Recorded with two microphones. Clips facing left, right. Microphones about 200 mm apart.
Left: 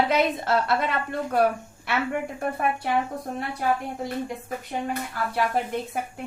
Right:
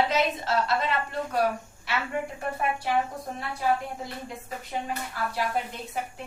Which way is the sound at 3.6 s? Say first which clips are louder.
Left 1 dB; 55° left (ahead or behind).